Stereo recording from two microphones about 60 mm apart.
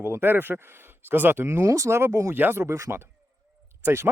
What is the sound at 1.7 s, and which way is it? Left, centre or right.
Speech, right.